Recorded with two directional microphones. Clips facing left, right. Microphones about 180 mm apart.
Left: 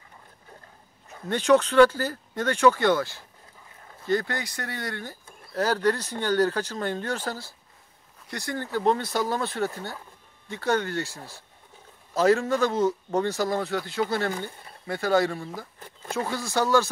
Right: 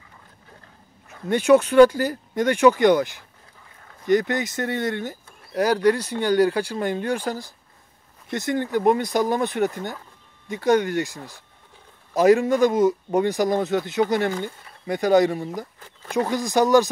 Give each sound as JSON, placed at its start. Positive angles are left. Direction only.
{"t": 1.3, "sound": "speech", "side_deg": -10}